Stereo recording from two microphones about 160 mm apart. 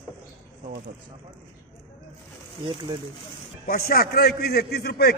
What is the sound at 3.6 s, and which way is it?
A man's voice, 70° left (ahead or behind).